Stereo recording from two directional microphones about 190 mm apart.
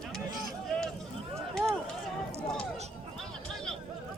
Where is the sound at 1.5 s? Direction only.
Centre (ahead or behind).